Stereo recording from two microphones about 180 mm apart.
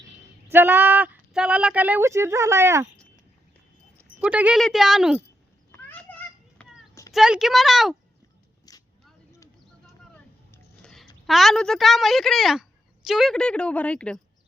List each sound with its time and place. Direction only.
0.5 s speech: 10° right (ahead or behind)
4.2 s a woman's voice: 5° right (ahead or behind)
5.9 s children playing: 10° left (ahead or behind)
7.1 s a woman's voice: centre (ahead or behind)
8.7 s a sound: 20° left (ahead or behind)
10.5 s a woman's voice: 5° left (ahead or behind)